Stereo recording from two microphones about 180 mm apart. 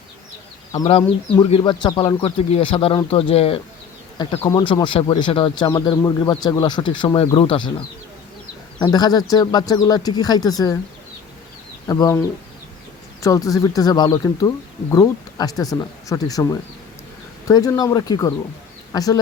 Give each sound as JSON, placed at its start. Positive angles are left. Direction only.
{"t": 1.5, "sound": "speech", "side_deg": 30}
{"t": 4.4, "sound": "speech", "side_deg": 20}
{"t": 8.8, "sound": "speech", "side_deg": 20}
{"t": 11.9, "sound": "speech", "side_deg": 20}